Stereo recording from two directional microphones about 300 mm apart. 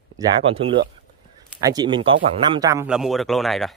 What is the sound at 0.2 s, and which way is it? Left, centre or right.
A man's voice, centre.